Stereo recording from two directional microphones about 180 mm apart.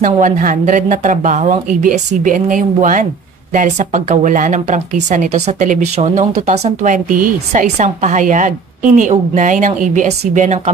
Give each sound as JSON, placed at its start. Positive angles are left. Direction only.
{"t": 0.0, "sound": "speech", "side_deg": -50}